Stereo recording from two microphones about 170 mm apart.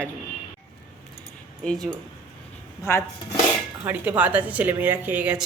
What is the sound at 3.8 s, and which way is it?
A woman's voice, 10° right (ahead or behind).